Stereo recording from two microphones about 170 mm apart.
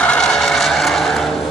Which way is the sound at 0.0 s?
5° left (ahead or behind).